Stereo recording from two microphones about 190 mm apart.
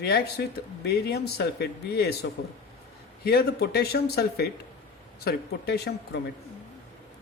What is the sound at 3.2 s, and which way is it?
Speech, 55° left (ahead or behind).